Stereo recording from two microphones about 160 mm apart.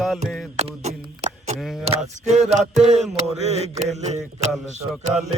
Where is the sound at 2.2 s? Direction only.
45° right (ahead or behind).